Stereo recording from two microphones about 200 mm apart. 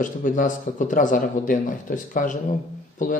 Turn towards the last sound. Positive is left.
turn(degrees=40)  # may be behind; listen again after turning